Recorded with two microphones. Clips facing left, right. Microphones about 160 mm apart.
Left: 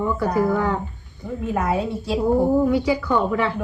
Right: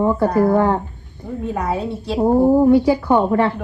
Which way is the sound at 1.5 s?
5° left (ahead or behind).